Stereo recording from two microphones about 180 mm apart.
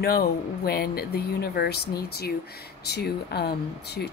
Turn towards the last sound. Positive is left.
turn(degrees=65)  # may be behind; listen again after turning